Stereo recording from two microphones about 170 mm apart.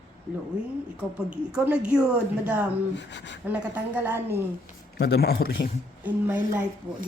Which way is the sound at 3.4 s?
10° right (ahead or behind).